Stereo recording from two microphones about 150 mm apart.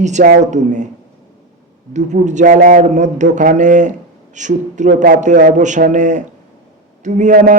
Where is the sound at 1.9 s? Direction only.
55° right (ahead or behind).